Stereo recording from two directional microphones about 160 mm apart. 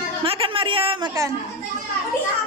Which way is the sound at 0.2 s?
35° right (ahead or behind).